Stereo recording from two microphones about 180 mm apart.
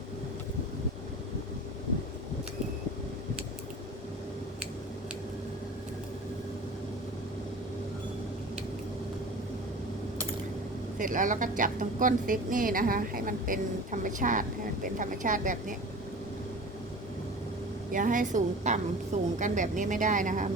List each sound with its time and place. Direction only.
10.9 s speech: 50° right (ahead or behind)
17.9 s speech: 50° right (ahead or behind)